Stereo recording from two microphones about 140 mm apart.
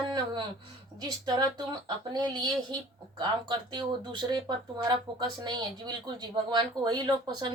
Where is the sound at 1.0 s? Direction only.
30° right (ahead or behind).